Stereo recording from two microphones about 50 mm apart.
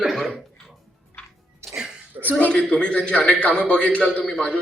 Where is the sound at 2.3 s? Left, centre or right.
Left.